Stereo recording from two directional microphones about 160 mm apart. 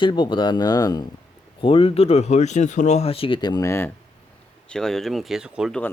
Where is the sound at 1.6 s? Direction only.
35° left (ahead or behind); by 3.9 s 15° left (ahead or behind).